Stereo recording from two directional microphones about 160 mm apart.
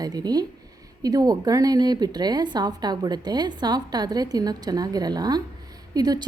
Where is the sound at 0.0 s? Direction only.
25° right (ahead or behind).